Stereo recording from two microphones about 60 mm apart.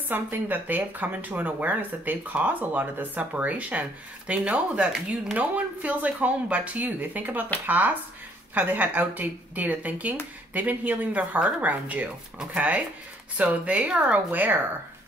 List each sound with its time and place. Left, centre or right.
0.1 s speech: right